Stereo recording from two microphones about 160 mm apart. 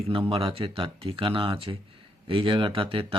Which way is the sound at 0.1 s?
35° right (ahead or behind).